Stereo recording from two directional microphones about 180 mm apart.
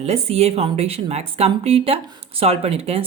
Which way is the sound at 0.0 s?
35° right (ahead or behind).